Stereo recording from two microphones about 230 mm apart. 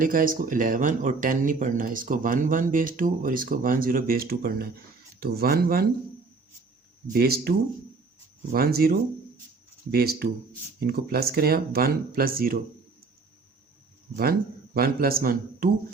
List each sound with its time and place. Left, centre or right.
0.0 s speech: right
7.1 s speech: right
8.5 s speech: right
14.2 s speech: right